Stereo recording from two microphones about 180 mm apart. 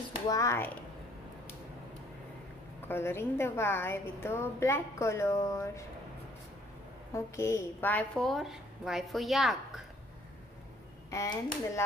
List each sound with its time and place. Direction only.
0.3 s a woman's voice: 15° left (ahead or behind)
2.9 s a woman's voice: 15° left (ahead or behind)
7.2 s a woman's voice: 15° left (ahead or behind); by 9.6 s centre (ahead or behind)
11.1 s a woman's voice: 15° left (ahead or behind)